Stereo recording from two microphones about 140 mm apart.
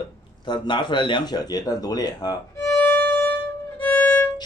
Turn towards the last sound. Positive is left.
turn(degrees=15)  # may be behind; listen again after turning